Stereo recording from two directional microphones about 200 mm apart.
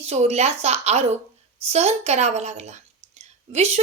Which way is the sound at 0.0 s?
30° right (ahead or behind).